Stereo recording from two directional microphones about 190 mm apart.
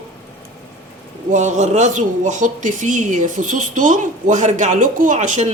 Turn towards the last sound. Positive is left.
turn(degrees=-40)  # may be behind; listen again after turning